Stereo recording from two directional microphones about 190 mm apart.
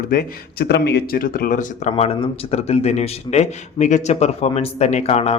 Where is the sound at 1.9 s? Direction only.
30° left (ahead or behind).